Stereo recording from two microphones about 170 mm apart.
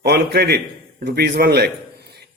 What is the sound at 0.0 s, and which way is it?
A man's voice, 65° right (ahead or behind).